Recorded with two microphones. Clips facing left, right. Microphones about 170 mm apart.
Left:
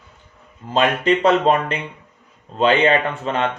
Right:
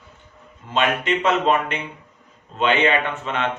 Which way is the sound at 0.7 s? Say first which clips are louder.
Left 4 dB; 35° left (ahead or behind).